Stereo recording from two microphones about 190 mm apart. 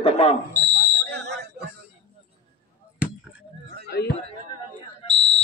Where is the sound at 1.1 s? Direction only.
65° right (ahead or behind).